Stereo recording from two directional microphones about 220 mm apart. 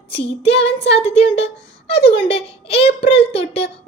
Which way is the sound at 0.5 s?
50° left (ahead or behind).